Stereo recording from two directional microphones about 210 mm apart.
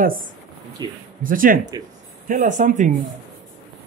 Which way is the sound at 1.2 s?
40° right (ahead or behind).